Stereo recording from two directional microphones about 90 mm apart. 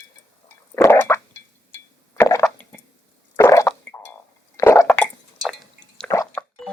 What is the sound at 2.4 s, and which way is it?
Squish, 20° left (ahead or behind).